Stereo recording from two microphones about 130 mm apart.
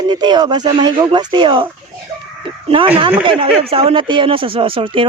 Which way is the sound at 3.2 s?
40° right (ahead or behind).